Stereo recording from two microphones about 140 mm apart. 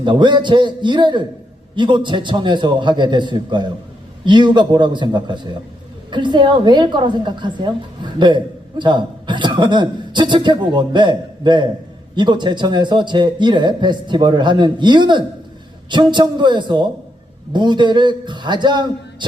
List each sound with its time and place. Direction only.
0.0 s speech: 35° right (ahead or behind)